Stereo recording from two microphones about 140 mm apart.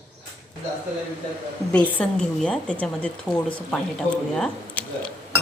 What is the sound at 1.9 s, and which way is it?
A woman's voice, 5° left (ahead or behind).